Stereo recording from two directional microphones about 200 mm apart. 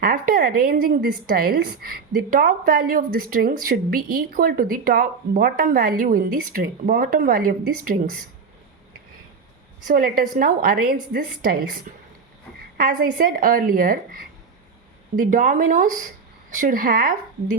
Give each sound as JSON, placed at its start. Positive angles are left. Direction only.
{"t": 0.0, "sound": "speech", "side_deg": -45}
{"t": 9.8, "sound": "speech", "side_deg": -45}